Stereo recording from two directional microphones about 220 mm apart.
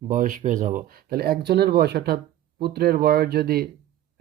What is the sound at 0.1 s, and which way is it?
Speech, 40° right (ahead or behind).